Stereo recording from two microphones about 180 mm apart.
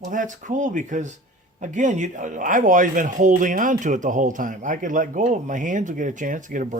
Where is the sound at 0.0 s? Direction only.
45° right (ahead or behind).